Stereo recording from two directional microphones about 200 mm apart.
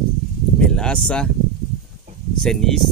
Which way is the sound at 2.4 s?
Centre (ahead or behind).